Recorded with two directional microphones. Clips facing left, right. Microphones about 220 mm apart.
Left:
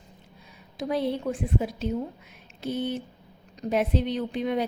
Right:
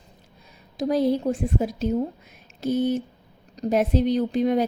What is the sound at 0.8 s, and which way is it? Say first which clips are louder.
A woman's voice: right 6 dB; 40° right (ahead or behind).